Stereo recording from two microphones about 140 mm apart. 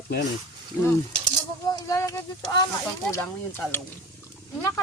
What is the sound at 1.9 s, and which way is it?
Speech, 20° left (ahead or behind).